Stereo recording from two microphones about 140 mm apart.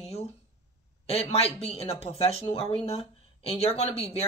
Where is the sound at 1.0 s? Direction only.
45° left (ahead or behind).